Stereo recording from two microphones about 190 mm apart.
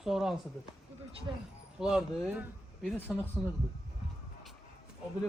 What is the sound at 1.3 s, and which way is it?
Speech, 15° right (ahead or behind).